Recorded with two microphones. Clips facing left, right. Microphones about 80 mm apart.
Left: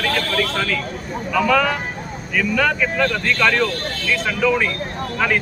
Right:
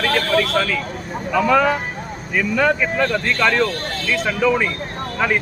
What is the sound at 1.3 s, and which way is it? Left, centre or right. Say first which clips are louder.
Speech: right 2 dB; right.